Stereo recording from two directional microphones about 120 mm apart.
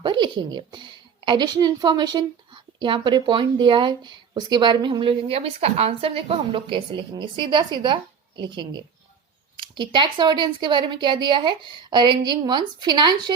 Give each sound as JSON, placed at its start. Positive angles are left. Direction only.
{"t": 0.0, "sound": "a woman's voice", "side_deg": -40}